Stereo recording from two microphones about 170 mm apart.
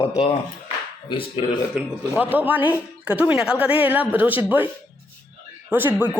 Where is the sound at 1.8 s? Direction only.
10° right (ahead or behind).